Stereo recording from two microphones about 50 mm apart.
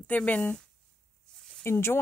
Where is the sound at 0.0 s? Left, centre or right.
Left.